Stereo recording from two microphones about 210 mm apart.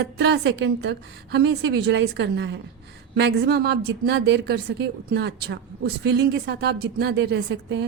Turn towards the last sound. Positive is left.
turn(degrees=-55)  # may be behind; listen again after turning